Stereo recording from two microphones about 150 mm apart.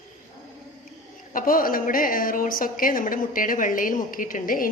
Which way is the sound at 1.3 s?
70° left (ahead or behind).